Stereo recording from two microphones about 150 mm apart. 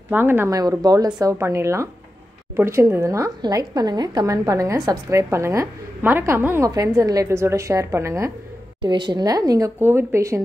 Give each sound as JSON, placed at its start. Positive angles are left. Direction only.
{"t": 0.1, "sound": "a woman's voice", "side_deg": -15}
{"t": 8.8, "sound": "a woman's voice", "side_deg": -30}